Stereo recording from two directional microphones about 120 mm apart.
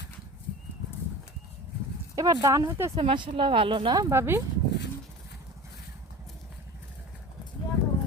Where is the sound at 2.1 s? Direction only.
30° right (ahead or behind).